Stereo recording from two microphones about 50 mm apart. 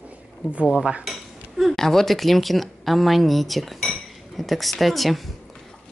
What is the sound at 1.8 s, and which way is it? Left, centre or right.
Speech, centre.